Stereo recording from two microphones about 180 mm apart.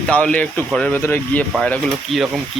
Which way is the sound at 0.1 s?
5° left (ahead or behind).